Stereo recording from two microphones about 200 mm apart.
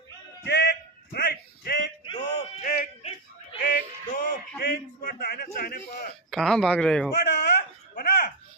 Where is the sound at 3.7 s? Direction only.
45° left (ahead or behind).